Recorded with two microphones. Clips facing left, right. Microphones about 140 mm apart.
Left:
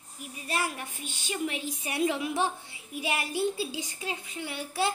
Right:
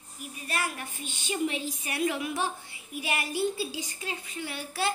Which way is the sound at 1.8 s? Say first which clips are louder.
Left 2 dB; 25° left (ahead or behind).